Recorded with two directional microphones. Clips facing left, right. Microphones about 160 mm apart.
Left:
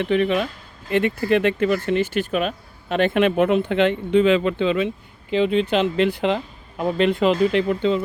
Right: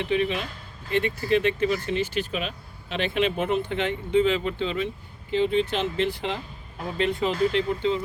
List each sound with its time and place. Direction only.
0.0 s speech: 55° left (ahead or behind); by 8.0 s 80° left